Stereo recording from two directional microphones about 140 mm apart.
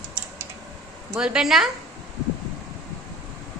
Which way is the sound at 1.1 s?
5° right (ahead or behind).